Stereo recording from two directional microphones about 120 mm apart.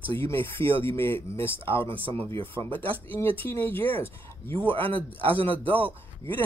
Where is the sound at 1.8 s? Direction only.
50° right (ahead or behind).